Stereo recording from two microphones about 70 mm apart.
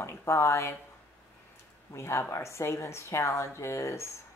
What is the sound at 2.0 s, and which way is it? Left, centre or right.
Speech, left.